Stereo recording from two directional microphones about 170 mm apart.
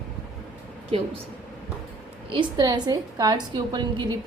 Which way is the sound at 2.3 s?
25° right (ahead or behind).